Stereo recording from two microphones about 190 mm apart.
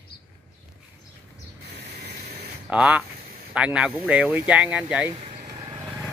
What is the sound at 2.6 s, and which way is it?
Speech, 5° right (ahead or behind).